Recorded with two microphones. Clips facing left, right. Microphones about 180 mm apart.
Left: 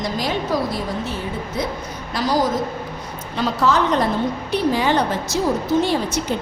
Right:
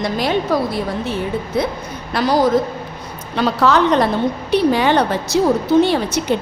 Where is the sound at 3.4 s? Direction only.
65° right (ahead or behind).